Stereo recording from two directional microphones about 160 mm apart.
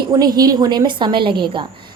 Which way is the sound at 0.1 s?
25° right (ahead or behind).